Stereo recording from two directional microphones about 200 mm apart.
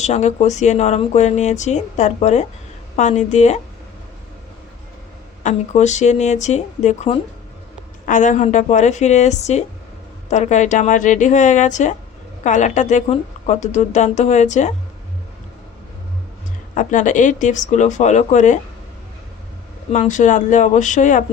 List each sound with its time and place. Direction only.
0.0 s speech: 35° left (ahead or behind)
5.4 s speech: 35° left (ahead or behind)
16.7 s speech: 40° left (ahead or behind)
19.9 s speech: 40° left (ahead or behind)